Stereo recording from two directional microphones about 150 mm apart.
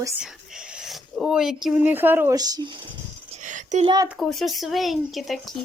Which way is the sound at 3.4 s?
55° right (ahead or behind).